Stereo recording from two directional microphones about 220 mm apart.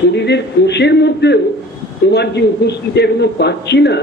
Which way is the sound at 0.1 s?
50° left (ahead or behind).